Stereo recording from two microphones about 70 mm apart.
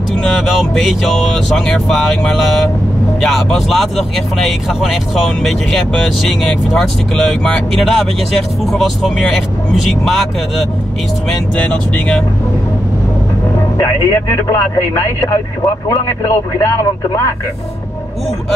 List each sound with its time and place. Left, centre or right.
0.2 s speech: centre
11.5 s speech: centre
13.7 s speech: left